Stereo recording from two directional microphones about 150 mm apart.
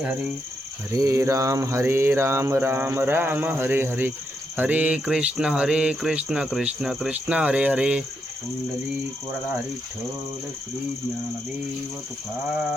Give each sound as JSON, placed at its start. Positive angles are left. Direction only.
{"t": 0.9, "sound": "speech", "side_deg": -20}